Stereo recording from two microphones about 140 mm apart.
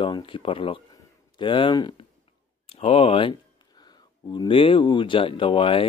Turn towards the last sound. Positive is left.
turn(degrees=40)  # may be behind; listen again after turning